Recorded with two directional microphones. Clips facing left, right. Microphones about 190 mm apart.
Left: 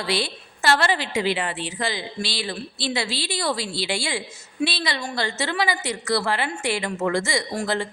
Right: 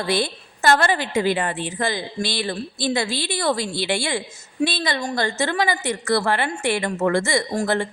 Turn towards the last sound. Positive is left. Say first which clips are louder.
# right 4 dB
turn(degrees=-55)  # may be behind; listen again after turning